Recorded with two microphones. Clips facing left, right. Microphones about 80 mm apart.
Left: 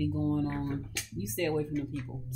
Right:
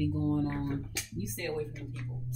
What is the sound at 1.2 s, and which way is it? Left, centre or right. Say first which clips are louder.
Speech: left 5 dB; left.